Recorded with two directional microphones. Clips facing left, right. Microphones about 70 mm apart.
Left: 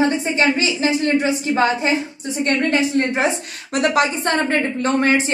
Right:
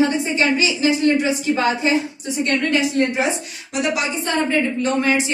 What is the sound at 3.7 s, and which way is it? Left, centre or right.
A woman's voice, left.